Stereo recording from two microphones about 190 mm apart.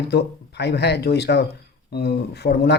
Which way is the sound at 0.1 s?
60° left (ahead or behind).